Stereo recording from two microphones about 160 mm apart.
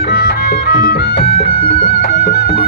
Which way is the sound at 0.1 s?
75° left (ahead or behind).